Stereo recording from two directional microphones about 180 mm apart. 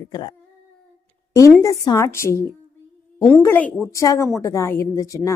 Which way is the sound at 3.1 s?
5° left (ahead or behind).